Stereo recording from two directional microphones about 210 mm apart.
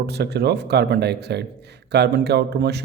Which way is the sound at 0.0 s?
50° right (ahead or behind).